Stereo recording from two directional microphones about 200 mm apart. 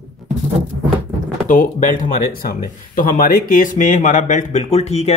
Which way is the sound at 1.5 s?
40° left (ahead or behind).